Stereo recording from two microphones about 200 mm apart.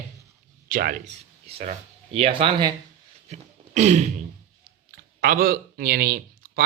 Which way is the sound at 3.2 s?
35° right (ahead or behind).